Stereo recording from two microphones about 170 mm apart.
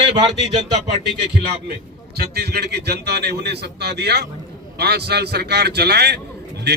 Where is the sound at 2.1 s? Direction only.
70° right (ahead or behind).